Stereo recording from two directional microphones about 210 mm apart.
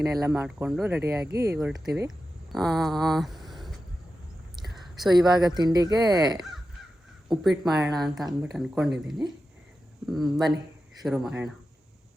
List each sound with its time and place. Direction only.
0.0 s speech: 10° right (ahead or behind)
1.5 s speech: centre (ahead or behind)
4.6 s a sound: centre (ahead or behind)
5.1 s speech: 20° right (ahead or behind)
7.6 s speech: centre (ahead or behind)